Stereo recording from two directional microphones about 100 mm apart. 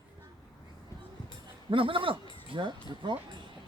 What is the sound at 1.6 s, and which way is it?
Speech, 60° right (ahead or behind).